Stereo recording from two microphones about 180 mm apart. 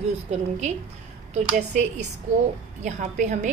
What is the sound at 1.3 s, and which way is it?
A woman's voice, 40° right (ahead or behind).